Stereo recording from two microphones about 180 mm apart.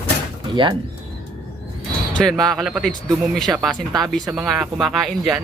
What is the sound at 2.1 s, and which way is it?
Speech, 5° left (ahead or behind).